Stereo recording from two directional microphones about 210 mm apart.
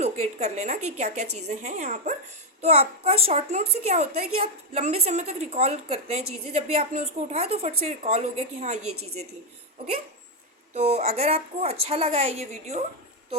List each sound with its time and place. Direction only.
0.0 s a woman's voice: 30° right (ahead or behind)
10.8 s a child's voice: 30° right (ahead or behind)